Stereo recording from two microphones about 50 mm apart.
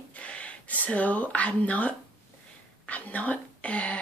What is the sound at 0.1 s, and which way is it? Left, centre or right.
Speech, left.